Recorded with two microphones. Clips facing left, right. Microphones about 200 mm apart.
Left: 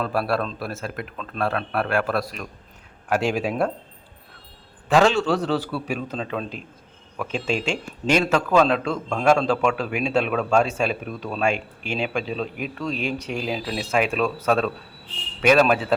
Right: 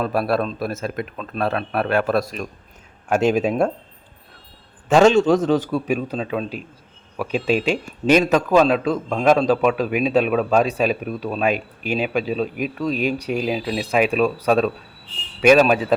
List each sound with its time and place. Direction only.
0.0 s speech: 20° right (ahead or behind)
4.9 s a man's voice: 20° right (ahead or behind)